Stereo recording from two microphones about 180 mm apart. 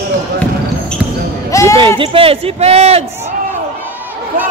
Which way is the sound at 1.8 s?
30° right (ahead or behind).